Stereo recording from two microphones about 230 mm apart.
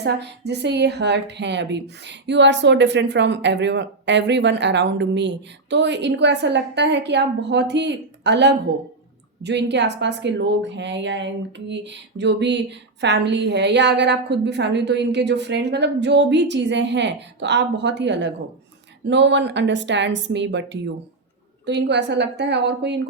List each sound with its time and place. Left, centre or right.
0.0 s speech: right